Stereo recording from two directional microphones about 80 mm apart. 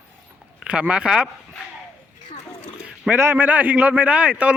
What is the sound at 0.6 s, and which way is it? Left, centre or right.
Speech, centre.